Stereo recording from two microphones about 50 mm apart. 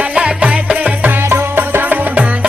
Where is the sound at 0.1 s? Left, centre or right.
Right.